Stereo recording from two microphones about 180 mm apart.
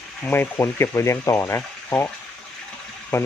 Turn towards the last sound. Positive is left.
turn(degrees=15)  # may be behind; listen again after turning